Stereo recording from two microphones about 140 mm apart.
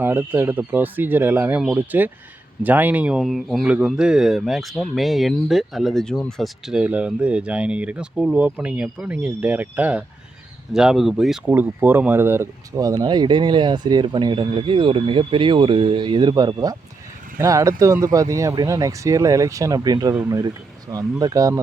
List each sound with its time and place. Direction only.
0.0 s speech: 15° right (ahead or behind)
11.4 s speech: 15° right (ahead or behind)